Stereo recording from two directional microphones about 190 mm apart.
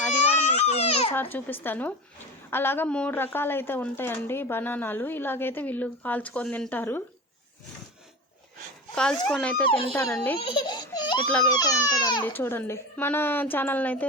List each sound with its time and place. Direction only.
0.3 s baby cry: 35° left (ahead or behind)
1.1 s a woman's voice: 10° left (ahead or behind)
9.2 s a woman's voice: 5° left (ahead or behind)
9.6 s speech: 30° left (ahead or behind)
9.9 s a woman's voice: 5° left (ahead or behind)
10.3 s speech: 25° left (ahead or behind)
12.2 s a woman's voice: 10° left (ahead or behind)